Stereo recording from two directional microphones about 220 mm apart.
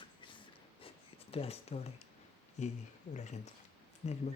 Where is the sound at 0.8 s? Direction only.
25° left (ahead or behind).